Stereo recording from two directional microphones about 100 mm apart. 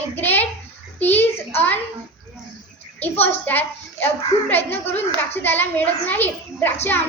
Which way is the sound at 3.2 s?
20° left (ahead or behind).